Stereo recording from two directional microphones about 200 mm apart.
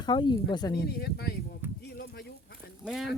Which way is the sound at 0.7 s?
55° left (ahead or behind).